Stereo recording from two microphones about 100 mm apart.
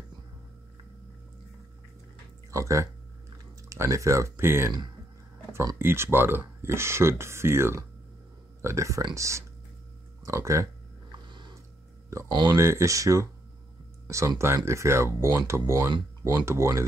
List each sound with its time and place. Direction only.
2.5 s speech: 30° right (ahead or behind)
5.8 s speech: 25° right (ahead or behind)
11.1 s a sound: 50° right (ahead or behind)
12.4 s speech: 30° right (ahead or behind)